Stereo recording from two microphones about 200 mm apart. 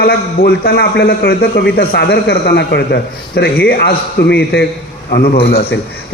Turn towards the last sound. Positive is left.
turn(degrees=55)  # may be behind; listen again after turning